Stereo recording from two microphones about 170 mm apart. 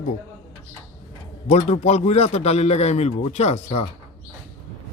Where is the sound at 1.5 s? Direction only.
40° left (ahead or behind).